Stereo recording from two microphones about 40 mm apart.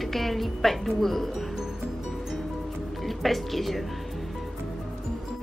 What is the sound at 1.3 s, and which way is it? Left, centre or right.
Music, centre.